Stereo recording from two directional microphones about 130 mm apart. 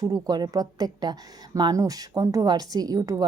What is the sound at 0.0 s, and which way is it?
A woman's voice, 30° right (ahead or behind).